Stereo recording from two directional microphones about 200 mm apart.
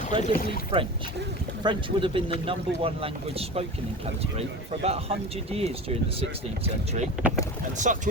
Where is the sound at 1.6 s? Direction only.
25° right (ahead or behind).